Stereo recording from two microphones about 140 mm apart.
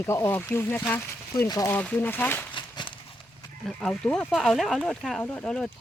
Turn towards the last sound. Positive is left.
turn(degrees=5)  # may be behind; listen again after turning